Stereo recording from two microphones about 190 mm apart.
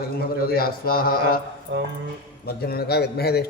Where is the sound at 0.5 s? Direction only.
50° left (ahead or behind).